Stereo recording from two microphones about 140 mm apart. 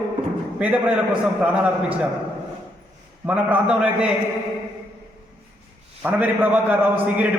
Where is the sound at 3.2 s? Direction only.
10° right (ahead or behind).